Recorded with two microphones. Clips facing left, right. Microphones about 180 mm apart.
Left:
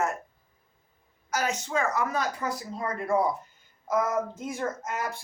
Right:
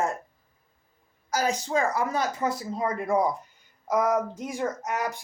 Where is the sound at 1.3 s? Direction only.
35° right (ahead or behind).